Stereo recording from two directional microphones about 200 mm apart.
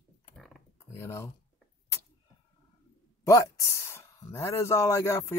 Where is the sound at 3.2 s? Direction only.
15° left (ahead or behind).